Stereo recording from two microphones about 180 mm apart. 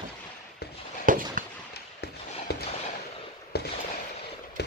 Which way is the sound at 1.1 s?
50° right (ahead or behind).